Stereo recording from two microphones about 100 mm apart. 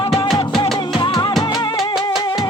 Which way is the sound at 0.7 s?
50° left (ahead or behind).